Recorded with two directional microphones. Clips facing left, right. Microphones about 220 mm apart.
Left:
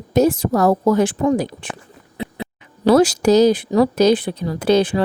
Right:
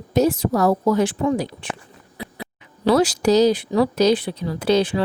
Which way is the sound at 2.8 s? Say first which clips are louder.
Left 4 dB; 45° left (ahead or behind).